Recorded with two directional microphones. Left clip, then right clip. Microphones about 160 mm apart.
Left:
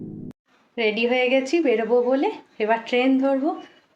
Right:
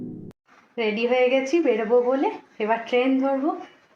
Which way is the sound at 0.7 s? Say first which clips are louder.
Left 1 dB; 10° left (ahead or behind).